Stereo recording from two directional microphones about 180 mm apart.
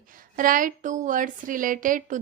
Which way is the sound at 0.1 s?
50° right (ahead or behind).